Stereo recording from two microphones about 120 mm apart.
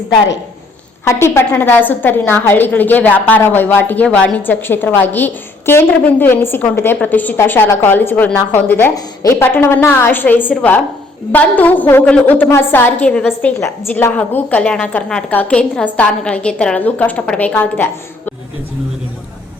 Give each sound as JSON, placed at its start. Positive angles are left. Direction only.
{"t": 1.0, "sound": "a woman's voice", "side_deg": 20}